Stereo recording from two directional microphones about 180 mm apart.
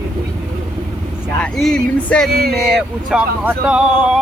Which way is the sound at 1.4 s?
Centre (ahead or behind).